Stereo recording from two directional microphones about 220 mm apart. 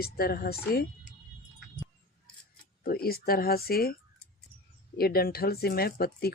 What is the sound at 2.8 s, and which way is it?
Speech, 45° left (ahead or behind).